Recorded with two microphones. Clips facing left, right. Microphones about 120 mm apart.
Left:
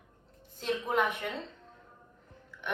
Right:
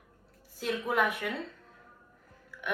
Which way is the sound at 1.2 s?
20° left (ahead or behind).